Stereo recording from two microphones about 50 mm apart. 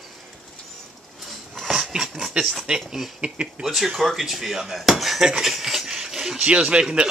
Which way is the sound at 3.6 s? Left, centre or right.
Centre.